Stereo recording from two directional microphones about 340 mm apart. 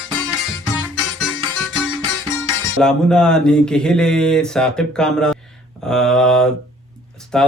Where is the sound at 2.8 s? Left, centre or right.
Centre.